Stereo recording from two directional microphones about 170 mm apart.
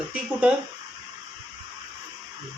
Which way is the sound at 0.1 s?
5° right (ahead or behind).